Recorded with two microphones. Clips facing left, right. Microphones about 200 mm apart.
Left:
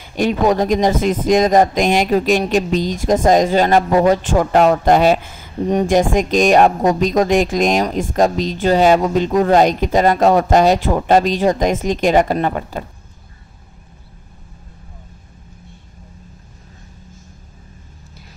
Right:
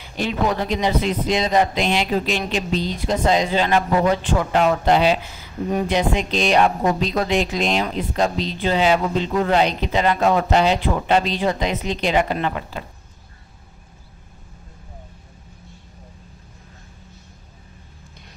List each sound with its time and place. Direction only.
0.0 s a woman's voice: 50° left (ahead or behind)
5.6 s a woman's voice: 35° left (ahead or behind)